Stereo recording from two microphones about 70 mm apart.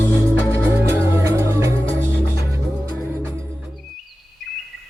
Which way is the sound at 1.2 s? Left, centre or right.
Right.